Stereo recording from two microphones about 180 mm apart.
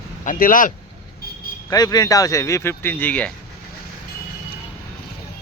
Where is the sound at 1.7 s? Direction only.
20° left (ahead or behind).